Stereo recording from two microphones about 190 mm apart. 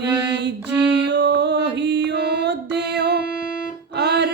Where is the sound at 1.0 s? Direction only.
65° right (ahead or behind).